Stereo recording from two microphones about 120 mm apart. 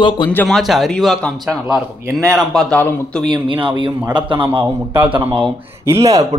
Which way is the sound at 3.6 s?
45° right (ahead or behind).